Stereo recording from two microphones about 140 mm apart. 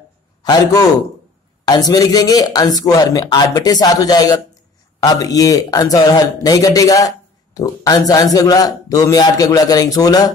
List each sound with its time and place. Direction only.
0.4 s a man's voice: 30° left (ahead or behind)